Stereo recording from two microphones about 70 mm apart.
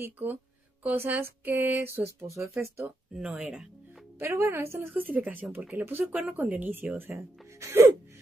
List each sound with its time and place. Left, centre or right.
0.0 s speech: right
3.2 s speech: centre
4.2 s speech: right
4.9 s speech: right